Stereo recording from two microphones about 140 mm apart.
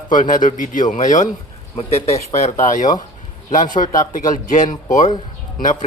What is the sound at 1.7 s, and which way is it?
A man's voice, 45° left (ahead or behind).